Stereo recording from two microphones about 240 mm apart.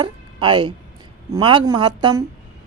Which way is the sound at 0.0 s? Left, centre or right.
Right.